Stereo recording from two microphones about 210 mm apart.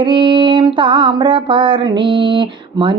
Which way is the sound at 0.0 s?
25° right (ahead or behind).